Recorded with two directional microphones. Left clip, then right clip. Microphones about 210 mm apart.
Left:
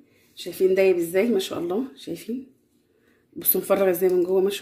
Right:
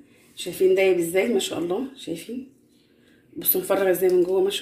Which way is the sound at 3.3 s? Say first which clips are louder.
Left 1 dB; 50° left (ahead or behind).